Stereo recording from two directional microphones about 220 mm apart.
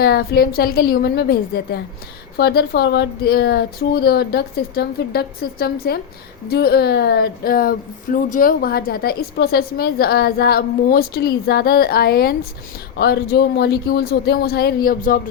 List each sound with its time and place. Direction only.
0.0 s speech: 45° left (ahead or behind)